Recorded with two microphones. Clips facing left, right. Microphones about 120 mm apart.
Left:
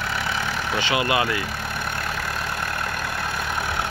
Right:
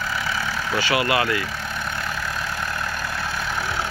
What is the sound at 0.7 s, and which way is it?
Speech, 20° left (ahead or behind).